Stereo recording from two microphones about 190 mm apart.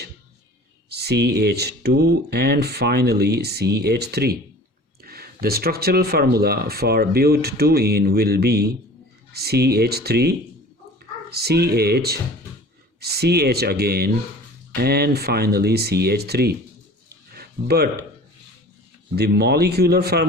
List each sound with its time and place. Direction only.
0.9 s speech: 60° right (ahead or behind)
17.3 s a sound: 55° right (ahead or behind)
19.1 s speech: 60° right (ahead or behind)